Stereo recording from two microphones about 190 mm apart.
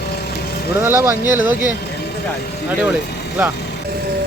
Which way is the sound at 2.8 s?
10° right (ahead or behind).